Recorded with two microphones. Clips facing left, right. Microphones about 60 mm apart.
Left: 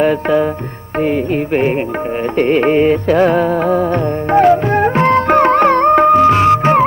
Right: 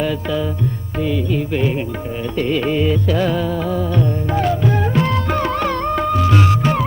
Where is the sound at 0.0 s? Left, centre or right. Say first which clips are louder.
Left 8 dB; left.